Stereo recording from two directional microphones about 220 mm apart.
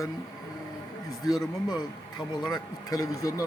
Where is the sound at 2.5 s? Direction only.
15° left (ahead or behind).